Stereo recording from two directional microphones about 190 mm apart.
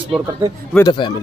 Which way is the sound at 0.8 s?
25° left (ahead or behind).